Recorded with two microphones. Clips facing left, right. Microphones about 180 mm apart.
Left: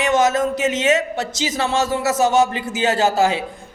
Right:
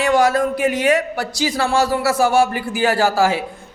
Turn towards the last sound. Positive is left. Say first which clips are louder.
# right 1 dB
turn(degrees=20)  # may be behind; listen again after turning